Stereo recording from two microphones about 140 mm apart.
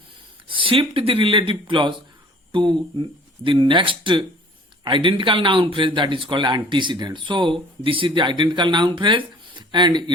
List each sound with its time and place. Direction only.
0.4 s speech: 40° right (ahead or behind)